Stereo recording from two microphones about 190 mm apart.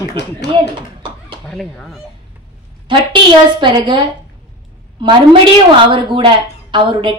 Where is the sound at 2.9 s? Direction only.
25° right (ahead or behind).